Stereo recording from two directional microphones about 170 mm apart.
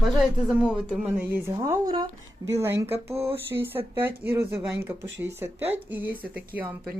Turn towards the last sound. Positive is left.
turn(degrees=-10)  # may be behind; listen again after turning